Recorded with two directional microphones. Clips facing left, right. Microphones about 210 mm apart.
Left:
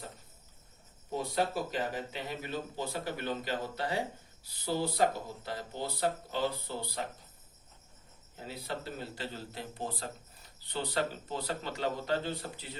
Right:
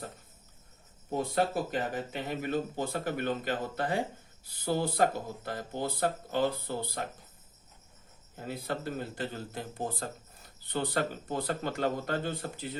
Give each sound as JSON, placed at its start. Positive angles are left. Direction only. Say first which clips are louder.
{"t": 1.1, "sound": "a man's voice", "louder": "right 3 dB", "side_deg": -50}
{"t": 8.4, "sound": "a man's voice", "louder": "right 4 dB", "side_deg": -50}